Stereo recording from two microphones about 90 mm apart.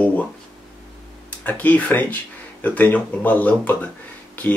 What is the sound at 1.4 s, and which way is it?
Speech, 20° left (ahead or behind).